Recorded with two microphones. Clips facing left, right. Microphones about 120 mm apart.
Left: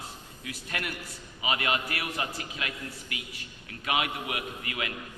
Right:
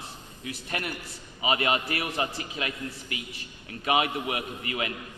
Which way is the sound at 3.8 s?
30° right (ahead or behind).